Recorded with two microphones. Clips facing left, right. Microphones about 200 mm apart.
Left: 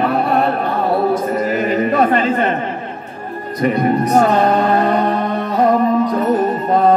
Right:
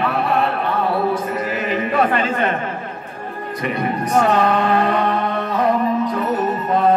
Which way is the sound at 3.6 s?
40° left (ahead or behind).